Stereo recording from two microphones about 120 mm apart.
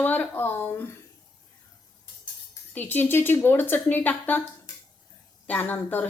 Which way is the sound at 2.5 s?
15° left (ahead or behind).